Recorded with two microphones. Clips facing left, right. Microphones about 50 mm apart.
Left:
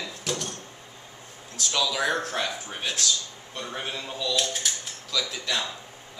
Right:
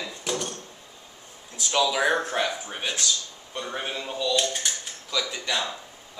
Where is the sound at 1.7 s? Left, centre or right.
Centre.